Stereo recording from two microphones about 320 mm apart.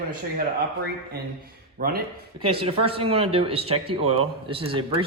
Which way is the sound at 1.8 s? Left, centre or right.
Right.